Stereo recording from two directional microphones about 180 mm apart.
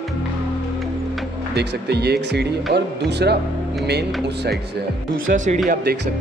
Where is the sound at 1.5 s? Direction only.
65° right (ahead or behind).